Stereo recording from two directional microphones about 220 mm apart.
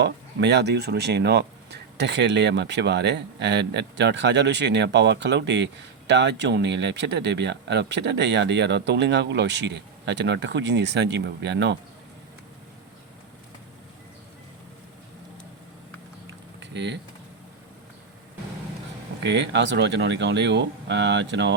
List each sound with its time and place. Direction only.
0.0 s speech: 50° right (ahead or behind)
16.6 s typing: 50° right (ahead or behind)
19.2 s speech: 55° right (ahead or behind)